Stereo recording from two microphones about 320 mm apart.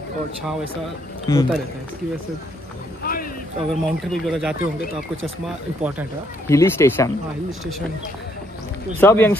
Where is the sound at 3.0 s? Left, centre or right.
Left.